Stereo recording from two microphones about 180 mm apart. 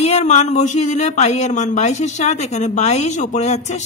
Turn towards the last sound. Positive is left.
turn(degrees=40)  # may be behind; listen again after turning